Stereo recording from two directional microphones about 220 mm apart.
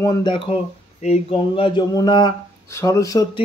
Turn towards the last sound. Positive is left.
turn(degrees=15)  # may be behind; listen again after turning